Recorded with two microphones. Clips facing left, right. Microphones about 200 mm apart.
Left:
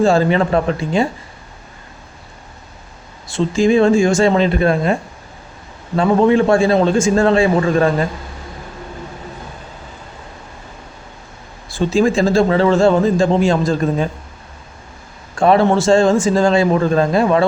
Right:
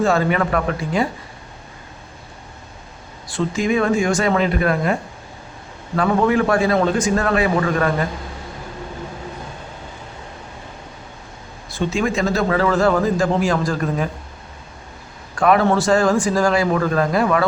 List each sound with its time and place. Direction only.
0.0 s speech: 30° left (ahead or behind)
3.2 s speech: 25° left (ahead or behind)
6.0 s speech: 25° left (ahead or behind)
11.7 s speech: 30° left (ahead or behind)
15.4 s speech: 25° left (ahead or behind)